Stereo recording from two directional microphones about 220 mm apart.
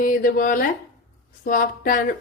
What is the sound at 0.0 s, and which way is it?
Speech, 40° left (ahead or behind).